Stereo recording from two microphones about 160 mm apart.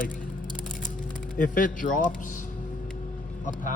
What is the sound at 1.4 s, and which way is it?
Speech, 55° left (ahead or behind).